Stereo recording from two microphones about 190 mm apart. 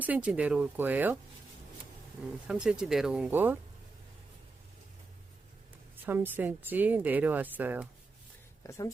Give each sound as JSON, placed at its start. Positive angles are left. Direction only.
{"t": 0.0, "sound": "a woman's voice", "side_deg": -5}
{"t": 2.5, "sound": "speech", "side_deg": -5}
{"t": 6.0, "sound": "a woman's voice", "side_deg": -10}
{"t": 8.6, "sound": "speech", "side_deg": 15}